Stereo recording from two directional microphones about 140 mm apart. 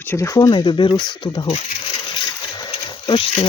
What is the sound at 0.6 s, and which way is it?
Speech, 35° left (ahead or behind).